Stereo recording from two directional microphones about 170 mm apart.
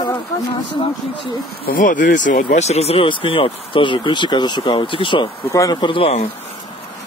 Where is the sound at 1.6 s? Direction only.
55° left (ahead or behind); by 6.2 s 35° left (ahead or behind).